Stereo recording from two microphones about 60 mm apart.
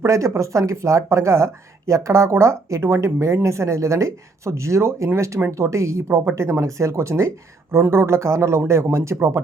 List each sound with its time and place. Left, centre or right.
0.0 s speech: right
6.1 s speech: right
7.8 s speech: right